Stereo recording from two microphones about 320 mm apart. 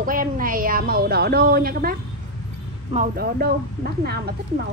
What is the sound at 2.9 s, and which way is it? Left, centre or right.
A woman's voice, right.